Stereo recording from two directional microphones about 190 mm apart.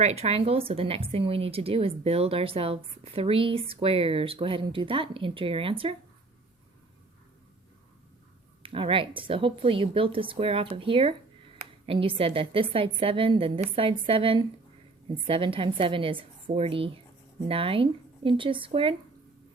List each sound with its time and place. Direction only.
0.0 s speech: 35° right (ahead or behind)
8.6 s speech: 30° right (ahead or behind)